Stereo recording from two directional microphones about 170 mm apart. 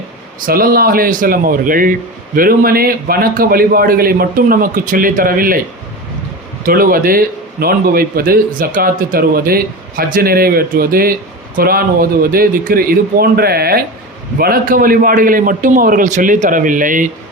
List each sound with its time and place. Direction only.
0.4 s speech: 60° right (ahead or behind)
6.7 s a man's voice: 55° right (ahead or behind)